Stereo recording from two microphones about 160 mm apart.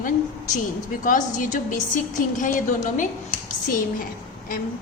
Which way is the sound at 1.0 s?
55° left (ahead or behind).